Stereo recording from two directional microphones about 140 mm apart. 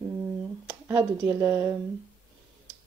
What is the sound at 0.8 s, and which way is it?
Speech, 15° right (ahead or behind).